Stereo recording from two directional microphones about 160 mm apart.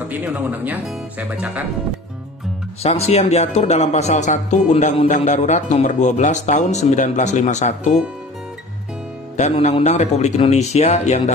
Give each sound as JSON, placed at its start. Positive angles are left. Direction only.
{"t": 0.1, "sound": "speech", "side_deg": -10}
{"t": 2.8, "sound": "speech", "side_deg": 40}
{"t": 9.4, "sound": "speech", "side_deg": 45}